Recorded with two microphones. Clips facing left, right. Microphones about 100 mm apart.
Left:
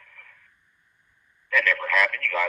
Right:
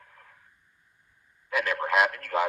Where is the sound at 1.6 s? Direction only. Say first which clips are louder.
Right 2 dB; 20° right (ahead or behind).